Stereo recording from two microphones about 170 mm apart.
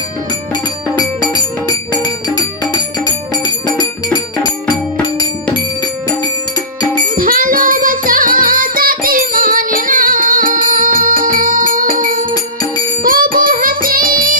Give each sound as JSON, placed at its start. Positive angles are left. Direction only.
{"t": 0.9, "sound": "music", "side_deg": 20}
{"t": 7.2, "sound": "music", "side_deg": -55}